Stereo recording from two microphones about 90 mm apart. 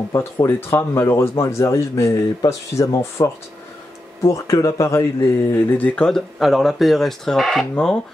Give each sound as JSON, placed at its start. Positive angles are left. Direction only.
{"t": 0.1, "sound": "speech", "side_deg": 30}
{"t": 5.5, "sound": "speech", "side_deg": 20}